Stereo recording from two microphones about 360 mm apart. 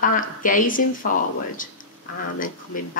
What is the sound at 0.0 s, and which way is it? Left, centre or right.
A woman's voice, left.